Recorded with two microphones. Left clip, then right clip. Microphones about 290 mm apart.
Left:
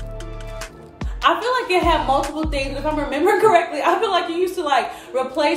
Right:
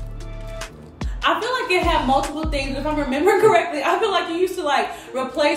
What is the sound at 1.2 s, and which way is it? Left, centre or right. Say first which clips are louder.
A woman's voice: left 2 dB; centre.